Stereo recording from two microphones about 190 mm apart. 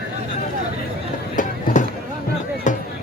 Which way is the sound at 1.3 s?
45° left (ahead or behind).